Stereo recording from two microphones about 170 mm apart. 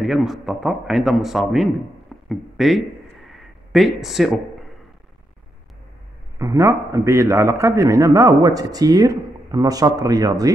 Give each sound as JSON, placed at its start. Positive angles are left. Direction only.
{"t": 0.0, "sound": "a man's voice", "side_deg": 0}
{"t": 3.3, "sound": "a sound", "side_deg": 0}
{"t": 6.3, "sound": "a man's voice", "side_deg": -20}